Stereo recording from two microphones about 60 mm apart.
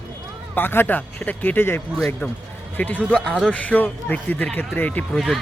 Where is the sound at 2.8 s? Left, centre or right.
Left.